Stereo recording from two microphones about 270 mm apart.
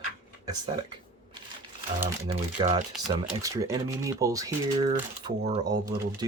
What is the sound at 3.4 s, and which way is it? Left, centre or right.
Speech, centre.